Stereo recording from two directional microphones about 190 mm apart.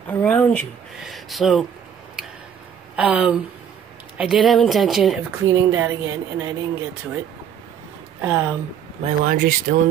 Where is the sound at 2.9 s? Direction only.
5° right (ahead or behind).